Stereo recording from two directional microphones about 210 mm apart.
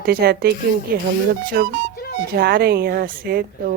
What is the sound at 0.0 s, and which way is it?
Speech, 45° right (ahead or behind).